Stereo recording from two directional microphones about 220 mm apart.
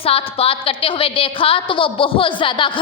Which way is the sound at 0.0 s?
25° left (ahead or behind).